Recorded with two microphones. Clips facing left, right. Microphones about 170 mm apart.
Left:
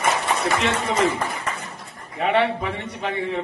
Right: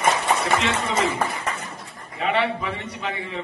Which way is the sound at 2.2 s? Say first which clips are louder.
Left 3 dB; 60° left (ahead or behind).